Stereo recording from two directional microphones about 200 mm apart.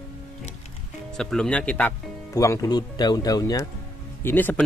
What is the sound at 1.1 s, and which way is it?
Speech, 5° left (ahead or behind).